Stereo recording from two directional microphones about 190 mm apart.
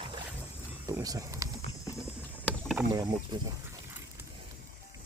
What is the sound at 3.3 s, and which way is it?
Speech, 25° right (ahead or behind).